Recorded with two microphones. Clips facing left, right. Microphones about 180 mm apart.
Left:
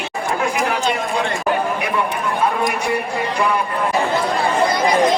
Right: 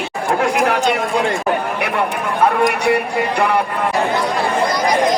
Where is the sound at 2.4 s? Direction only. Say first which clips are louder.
Right 6 dB; 65° right (ahead or behind).